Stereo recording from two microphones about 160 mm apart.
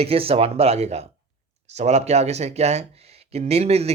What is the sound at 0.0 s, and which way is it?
Speech, 35° right (ahead or behind).